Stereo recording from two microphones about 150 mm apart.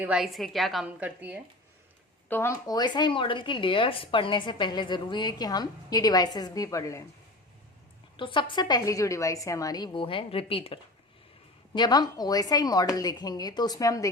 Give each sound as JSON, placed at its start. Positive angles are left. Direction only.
{"t": 0.0, "sound": "a woman's voice", "side_deg": -5}
{"t": 2.3, "sound": "speech", "side_deg": 20}
{"t": 8.1, "sound": "speech", "side_deg": 35}
{"t": 11.7, "sound": "speech", "side_deg": 30}